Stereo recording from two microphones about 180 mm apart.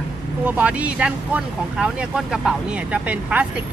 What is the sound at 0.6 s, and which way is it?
Speech, 5° right (ahead or behind).